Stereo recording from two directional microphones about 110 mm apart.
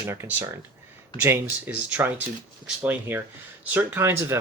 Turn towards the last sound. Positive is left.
turn(degrees=-20)  # may be behind; listen again after turning